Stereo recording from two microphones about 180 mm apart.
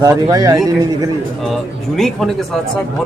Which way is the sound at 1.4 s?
Centre (ahead or behind).